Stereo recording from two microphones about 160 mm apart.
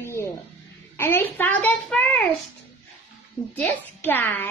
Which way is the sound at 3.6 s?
10° left (ahead or behind).